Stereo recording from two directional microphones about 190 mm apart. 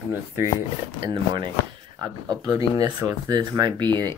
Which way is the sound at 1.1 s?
25° right (ahead or behind).